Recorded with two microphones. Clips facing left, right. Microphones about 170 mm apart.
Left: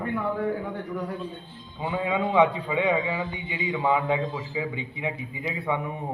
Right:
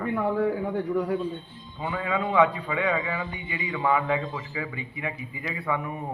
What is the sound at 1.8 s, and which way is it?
A man's voice, 15° left (ahead or behind).